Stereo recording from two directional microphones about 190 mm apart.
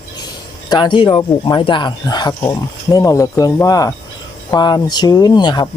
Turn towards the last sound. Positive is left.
turn(degrees=25)  # may be behind; listen again after turning